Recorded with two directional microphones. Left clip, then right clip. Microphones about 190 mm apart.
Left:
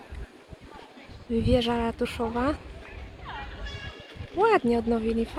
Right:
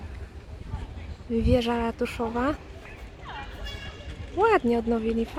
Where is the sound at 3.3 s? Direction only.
20° right (ahead or behind).